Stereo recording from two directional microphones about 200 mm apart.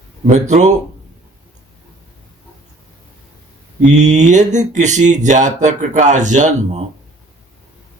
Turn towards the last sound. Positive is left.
turn(degrees=-35)  # may be behind; listen again after turning